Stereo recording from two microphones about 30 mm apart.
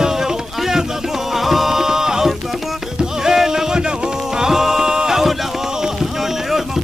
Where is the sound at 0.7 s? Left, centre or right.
Centre.